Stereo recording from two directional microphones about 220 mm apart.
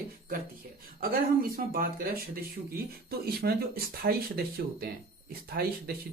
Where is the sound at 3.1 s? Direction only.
45° right (ahead or behind).